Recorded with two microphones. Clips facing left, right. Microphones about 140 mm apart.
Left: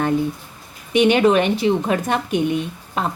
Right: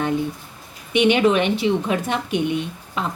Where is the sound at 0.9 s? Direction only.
40° left (ahead or behind).